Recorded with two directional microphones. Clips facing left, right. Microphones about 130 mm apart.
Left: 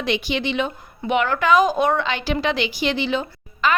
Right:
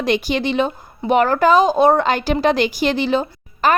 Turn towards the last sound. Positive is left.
turn(degrees=-40)  # may be behind; listen again after turning